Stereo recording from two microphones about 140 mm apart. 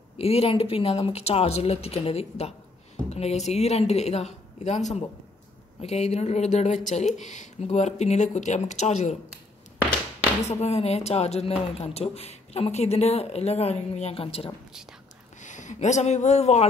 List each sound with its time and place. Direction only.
0.2 s a man's voice: 45° left (ahead or behind)
10.5 s a man's voice: 50° left (ahead or behind)
15.4 s speech: 60° left (ahead or behind)